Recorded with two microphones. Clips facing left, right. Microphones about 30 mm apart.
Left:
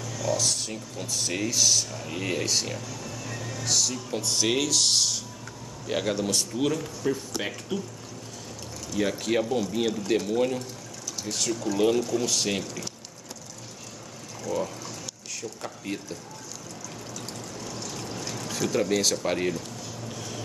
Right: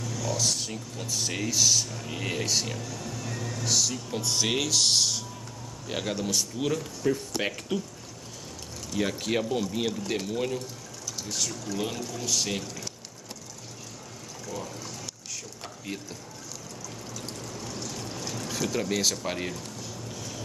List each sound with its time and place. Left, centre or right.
0.3 s speech: centre
7.3 s speech: centre
8.9 s speech: centre
14.4 s water: centre
15.8 s speech: centre
17.8 s pour: centre
19.2 s speech: centre
20.2 s music: centre